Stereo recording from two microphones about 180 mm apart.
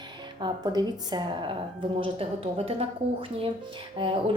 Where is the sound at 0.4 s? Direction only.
20° right (ahead or behind).